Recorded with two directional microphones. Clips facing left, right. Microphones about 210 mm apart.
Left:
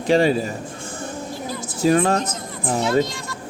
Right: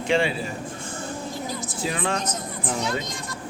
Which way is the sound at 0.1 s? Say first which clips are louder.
Left 6 dB; 40° left (ahead or behind).